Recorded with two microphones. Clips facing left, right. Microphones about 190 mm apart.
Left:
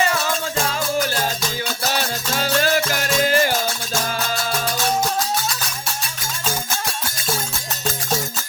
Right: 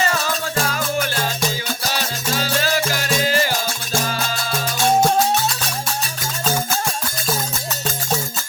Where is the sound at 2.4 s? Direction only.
50° left (ahead or behind).